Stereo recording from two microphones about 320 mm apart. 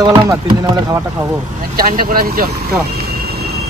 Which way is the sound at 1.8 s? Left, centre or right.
Right.